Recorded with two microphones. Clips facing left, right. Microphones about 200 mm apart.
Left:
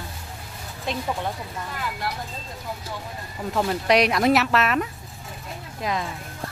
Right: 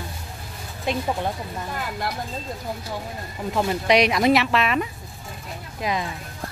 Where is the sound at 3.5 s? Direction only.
Centre (ahead or behind).